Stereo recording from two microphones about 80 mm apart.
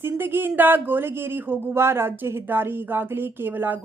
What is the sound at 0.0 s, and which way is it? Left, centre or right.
A woman's voice, right.